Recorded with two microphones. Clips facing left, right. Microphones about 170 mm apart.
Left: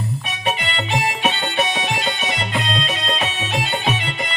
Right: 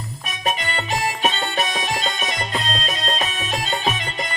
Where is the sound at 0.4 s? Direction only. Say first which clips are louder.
Even; 40° right (ahead or behind).